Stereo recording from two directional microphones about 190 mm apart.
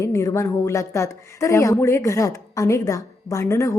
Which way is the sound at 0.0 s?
15° left (ahead or behind).